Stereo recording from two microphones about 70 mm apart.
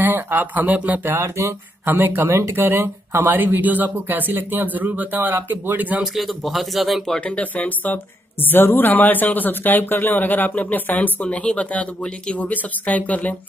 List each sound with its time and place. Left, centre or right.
0.0 s speech: right
1.0 s speech: right
6.1 s speech: centre
7.2 s speech: centre